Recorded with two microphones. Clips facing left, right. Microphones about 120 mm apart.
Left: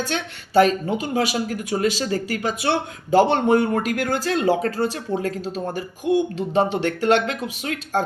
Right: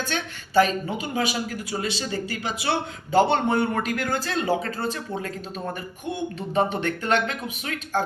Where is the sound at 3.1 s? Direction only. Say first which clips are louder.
Left 4 dB; 45° left (ahead or behind).